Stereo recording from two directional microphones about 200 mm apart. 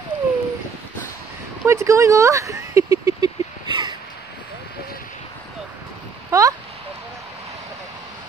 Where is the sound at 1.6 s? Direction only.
15° right (ahead or behind).